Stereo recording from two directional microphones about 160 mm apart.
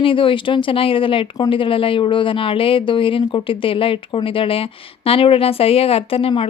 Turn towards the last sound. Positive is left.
turn(degrees=35)  # may be behind; listen again after turning